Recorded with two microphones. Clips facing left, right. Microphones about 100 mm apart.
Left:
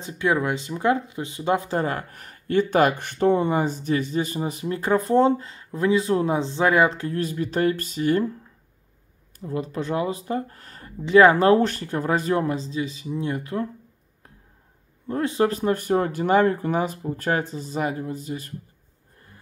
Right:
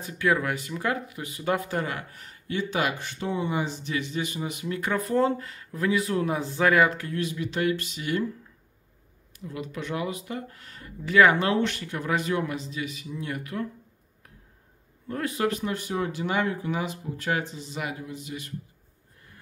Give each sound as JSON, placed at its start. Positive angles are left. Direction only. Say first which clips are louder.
{"t": 0.0, "sound": "speech", "louder": "left 2 dB", "side_deg": 25}
{"t": 9.4, "sound": "speech", "louder": "left 7 dB", "side_deg": 35}
{"t": 15.0, "sound": "speech", "louder": "left 5 dB", "side_deg": 25}